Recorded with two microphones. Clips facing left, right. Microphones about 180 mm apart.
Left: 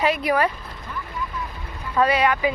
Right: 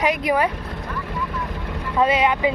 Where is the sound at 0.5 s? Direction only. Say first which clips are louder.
Right 5 dB; 70° right (ahead or behind).